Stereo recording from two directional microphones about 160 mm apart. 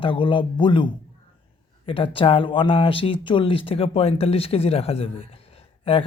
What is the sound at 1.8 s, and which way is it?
Speech, 35° left (ahead or behind).